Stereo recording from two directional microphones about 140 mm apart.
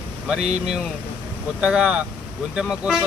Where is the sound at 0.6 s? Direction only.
5° right (ahead or behind).